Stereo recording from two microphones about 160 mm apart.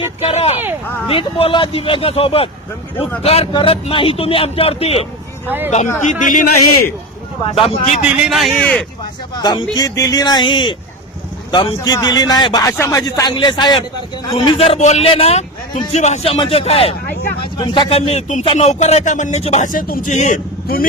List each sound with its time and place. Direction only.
0.0 s a man's voice: 40° left (ahead or behind)
5.5 s speech: 15° right (ahead or behind)
6.1 s speech: 55° left (ahead or behind)
7.5 s a man's voice: 40° left (ahead or behind)
8.0 s speech: 5° right (ahead or behind); by 8.9 s 10° left (ahead or behind)
9.3 s a man's voice: 25° left (ahead or behind); by 20.8 s 60° left (ahead or behind)